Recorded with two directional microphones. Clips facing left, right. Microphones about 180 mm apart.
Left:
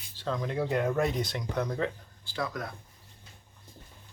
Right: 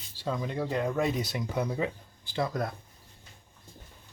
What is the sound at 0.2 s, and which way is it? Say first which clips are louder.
Speech: left 1 dB; 5° right (ahead or behind).